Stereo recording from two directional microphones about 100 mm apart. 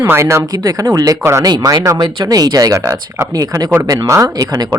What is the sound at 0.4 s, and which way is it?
Speech, 40° right (ahead or behind).